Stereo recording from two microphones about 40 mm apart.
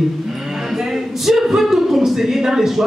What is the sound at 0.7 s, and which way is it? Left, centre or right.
Speech, centre.